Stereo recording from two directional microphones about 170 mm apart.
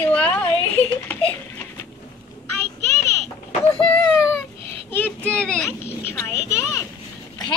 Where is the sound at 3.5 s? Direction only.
30° left (ahead or behind).